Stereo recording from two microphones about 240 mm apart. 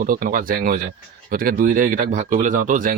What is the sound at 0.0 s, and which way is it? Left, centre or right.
Speech, right.